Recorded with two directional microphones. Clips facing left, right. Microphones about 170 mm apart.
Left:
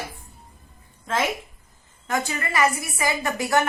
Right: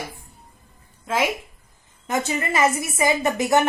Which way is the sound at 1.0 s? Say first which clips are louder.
Right 2 dB; 10° right (ahead or behind).